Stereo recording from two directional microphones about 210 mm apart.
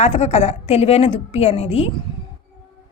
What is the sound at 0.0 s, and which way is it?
A woman's voice, 30° left (ahead or behind).